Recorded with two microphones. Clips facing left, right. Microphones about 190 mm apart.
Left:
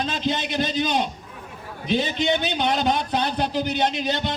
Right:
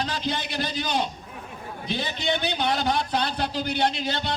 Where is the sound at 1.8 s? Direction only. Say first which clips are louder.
Left 6 dB; 20° left (ahead or behind).